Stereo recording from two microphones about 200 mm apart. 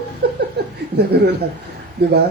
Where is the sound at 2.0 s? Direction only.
55° right (ahead or behind).